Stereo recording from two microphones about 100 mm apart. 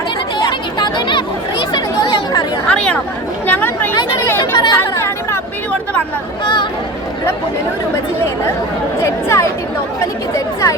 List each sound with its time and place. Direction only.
0.3 s a sound: 50° left (ahead or behind)
1.7 s chatter: 40° left (ahead or behind)
2.6 s chatter: 10° left (ahead or behind)
4.5 s chatter: 45° left (ahead or behind)
4.8 s chatter: 25° left (ahead or behind)
6.4 s chatter: 50° left (ahead or behind)
9.0 s chatter: 30° left (ahead or behind)
10.3 s speech: 35° left (ahead or behind)